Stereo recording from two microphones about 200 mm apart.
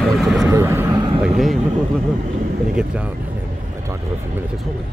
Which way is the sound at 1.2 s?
Centre (ahead or behind).